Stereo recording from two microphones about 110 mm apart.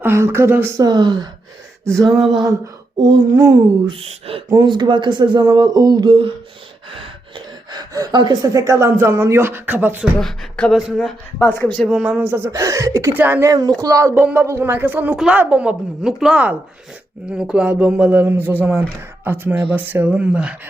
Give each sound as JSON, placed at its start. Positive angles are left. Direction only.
{"t": 0.0, "sound": "speech", "side_deg": -25}
{"t": 0.8, "sound": "a sound", "side_deg": -40}
{"t": 3.0, "sound": "a sound", "side_deg": -40}
{"t": 4.3, "sound": "speech", "side_deg": -60}
{"t": 4.6, "sound": "speech", "side_deg": -45}
{"t": 10.2, "sound": "speech", "side_deg": 5}
{"t": 12.0, "sound": "speech", "side_deg": -10}
{"t": 12.5, "sound": "speech", "side_deg": -30}
{"t": 13.1, "sound": "speech", "side_deg": -20}
{"t": 13.5, "sound": "a sound", "side_deg": -30}
{"t": 14.3, "sound": "speech", "side_deg": -25}